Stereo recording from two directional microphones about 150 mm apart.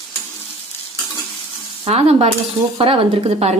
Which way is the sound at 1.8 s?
40° right (ahead or behind).